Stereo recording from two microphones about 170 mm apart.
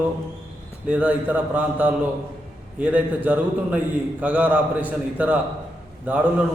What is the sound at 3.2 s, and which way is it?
A man's voice, 10° right (ahead or behind).